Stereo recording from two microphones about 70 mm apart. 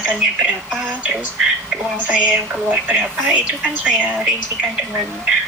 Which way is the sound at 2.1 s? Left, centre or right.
Centre.